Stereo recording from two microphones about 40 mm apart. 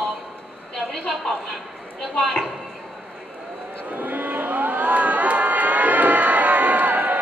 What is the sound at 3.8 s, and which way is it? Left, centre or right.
Crowd, right.